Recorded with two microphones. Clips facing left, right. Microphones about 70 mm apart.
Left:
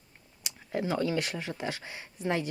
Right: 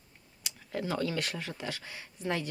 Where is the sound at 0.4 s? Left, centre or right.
Centre.